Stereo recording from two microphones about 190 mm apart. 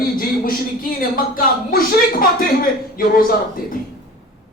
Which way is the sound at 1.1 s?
50° left (ahead or behind).